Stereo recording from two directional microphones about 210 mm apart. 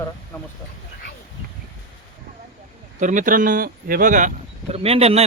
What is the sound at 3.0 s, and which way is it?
Speech, 35° right (ahead or behind).